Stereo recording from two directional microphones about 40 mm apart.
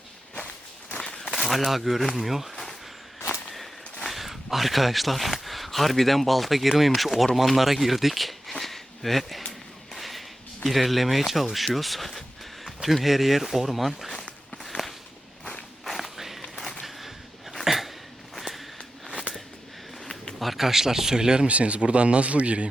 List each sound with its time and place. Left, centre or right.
0.9 s a sound: centre
1.3 s speech: centre
4.1 s speech: centre
8.5 s a sound: centre
10.7 s speech: centre
14.1 s walk: centre
14.7 s a sound: left
15.8 s walk: centre
17.6 s dog: centre
18.3 s a sound: centre
20.4 s speech: centre
21.4 s speech: right